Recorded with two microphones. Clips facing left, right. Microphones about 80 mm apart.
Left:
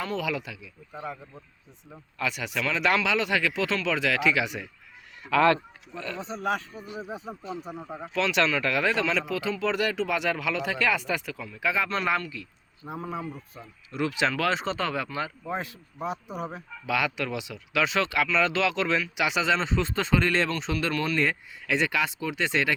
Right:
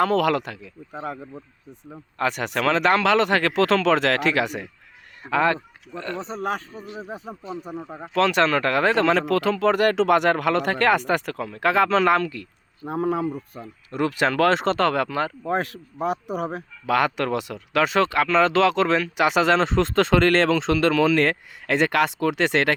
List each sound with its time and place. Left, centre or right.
0.0 s speech: right
2.1 s speech: right
5.3 s speech: right
5.9 s speech: right
9.9 s speech: right
13.5 s speech: right
14.6 s speech: right
16.8 s speech: right
21.7 s speech: right